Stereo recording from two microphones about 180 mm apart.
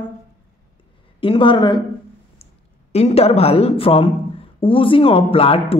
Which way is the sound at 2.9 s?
35° left (ahead or behind).